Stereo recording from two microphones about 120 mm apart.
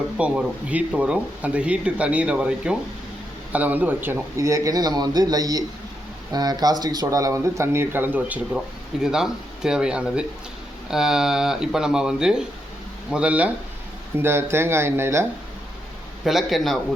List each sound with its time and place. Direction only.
0.2 s speech: 10° right (ahead or behind)
9.0 s speech: 5° right (ahead or behind)
14.2 s speech: 20° right (ahead or behind)
16.2 s speech: centre (ahead or behind)